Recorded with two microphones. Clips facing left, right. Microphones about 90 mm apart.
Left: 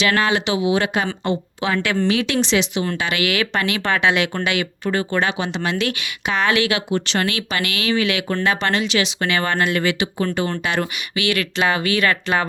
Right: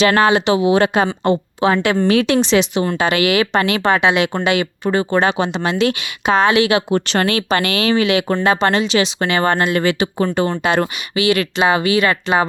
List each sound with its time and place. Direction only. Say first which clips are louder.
0.0 s speech: right 6 dB; 35° right (ahead or behind)
2.0 s speech: right 6 dB; 45° right (ahead or behind)
3.9 s speech: right 3 dB; 25° right (ahead or behind)
6.9 s speech: right 5 dB; 45° right (ahead or behind)
8.0 s speech: right 5 dB; 25° right (ahead or behind)